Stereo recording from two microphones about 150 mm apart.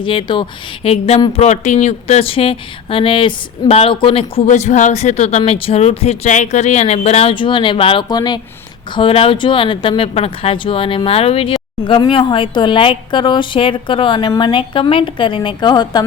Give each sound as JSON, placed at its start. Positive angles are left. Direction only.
{"t": 0.0, "sound": "speech", "side_deg": 35}
{"t": 9.0, "sound": "speech", "side_deg": 40}